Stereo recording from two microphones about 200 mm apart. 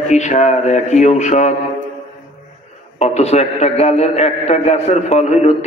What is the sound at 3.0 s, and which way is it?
A man's voice, 35° left (ahead or behind).